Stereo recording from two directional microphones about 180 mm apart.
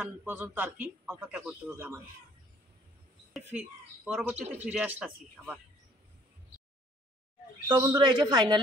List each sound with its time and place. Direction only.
0.0 s a man's voice: 10° right (ahead or behind)
3.3 s speech: 5° right (ahead or behind)
4.4 s speech: 40° right (ahead or behind)
4.6 s a man's voice: 10° right (ahead or behind)
7.6 s speech: 20° right (ahead or behind)